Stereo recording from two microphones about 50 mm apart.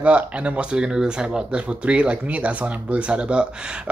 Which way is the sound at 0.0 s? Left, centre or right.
Right.